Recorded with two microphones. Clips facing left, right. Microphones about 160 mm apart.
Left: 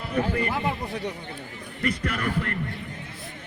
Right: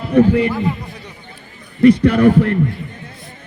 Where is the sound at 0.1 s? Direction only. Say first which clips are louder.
Right 13 dB; 70° right (ahead or behind).